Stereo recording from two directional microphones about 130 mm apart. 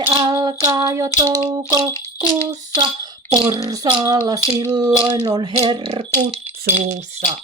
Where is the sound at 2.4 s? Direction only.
35° right (ahead or behind).